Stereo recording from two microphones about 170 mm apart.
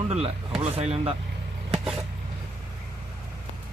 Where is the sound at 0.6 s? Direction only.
35° right (ahead or behind).